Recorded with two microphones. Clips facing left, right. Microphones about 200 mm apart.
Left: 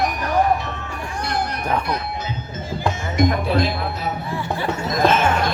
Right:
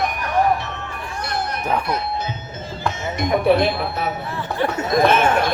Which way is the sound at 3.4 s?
60° right (ahead or behind).